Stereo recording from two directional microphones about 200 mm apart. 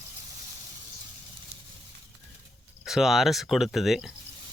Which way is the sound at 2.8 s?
Centre (ahead or behind).